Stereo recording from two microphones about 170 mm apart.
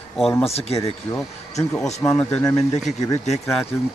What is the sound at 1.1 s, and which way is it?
A man's voice, 15° left (ahead or behind).